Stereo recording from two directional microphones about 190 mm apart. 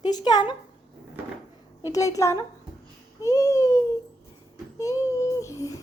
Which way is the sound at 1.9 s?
15° left (ahead or behind).